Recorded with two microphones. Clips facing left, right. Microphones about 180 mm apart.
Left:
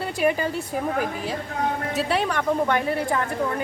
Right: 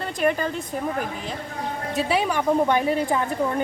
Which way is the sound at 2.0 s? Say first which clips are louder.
Right 3 dB; 5° right (ahead or behind).